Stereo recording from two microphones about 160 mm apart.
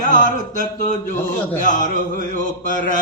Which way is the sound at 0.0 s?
55° left (ahead or behind).